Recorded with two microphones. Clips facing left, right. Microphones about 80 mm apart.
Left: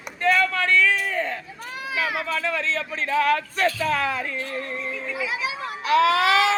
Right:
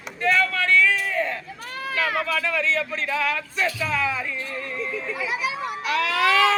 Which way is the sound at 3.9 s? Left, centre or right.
Left.